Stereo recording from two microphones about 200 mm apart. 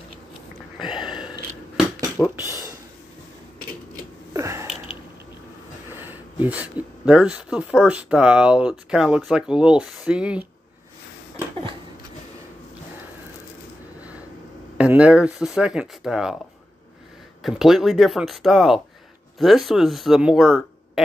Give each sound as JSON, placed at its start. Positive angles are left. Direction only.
{"t": 0.8, "sound": "a sound", "side_deg": 20}
{"t": 2.3, "sound": "speech", "side_deg": 20}
{"t": 4.3, "sound": "a sound", "side_deg": -15}
{"t": 5.9, "sound": "speech", "side_deg": -10}
{"t": 14.8, "sound": "speech", "side_deg": -5}
{"t": 17.4, "sound": "speech", "side_deg": 0}